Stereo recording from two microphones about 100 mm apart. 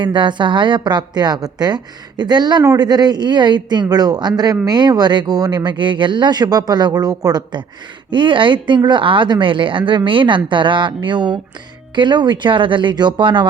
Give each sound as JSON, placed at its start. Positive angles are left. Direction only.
{"t": 0.0, "sound": "a woman's voice", "side_deg": -50}
{"t": 8.1, "sound": "a woman's voice", "side_deg": -55}